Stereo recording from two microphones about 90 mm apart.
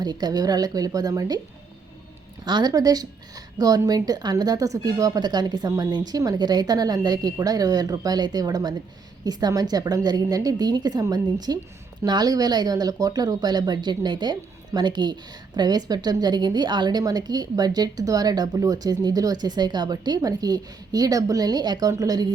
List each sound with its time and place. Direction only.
0.0 s a woman's voice: 50° right (ahead or behind)
2.4 s a woman's voice: 55° right (ahead or behind)
17.0 s a woman's voice: 45° right (ahead or behind)